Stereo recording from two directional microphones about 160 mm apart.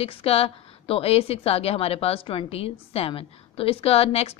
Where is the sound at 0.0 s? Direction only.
35° left (ahead or behind).